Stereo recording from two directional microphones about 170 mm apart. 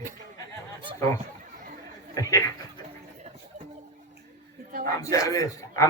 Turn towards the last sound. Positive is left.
turn(degrees=20)  # may be behind; listen again after turning